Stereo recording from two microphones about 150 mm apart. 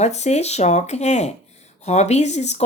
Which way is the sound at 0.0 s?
50° left (ahead or behind).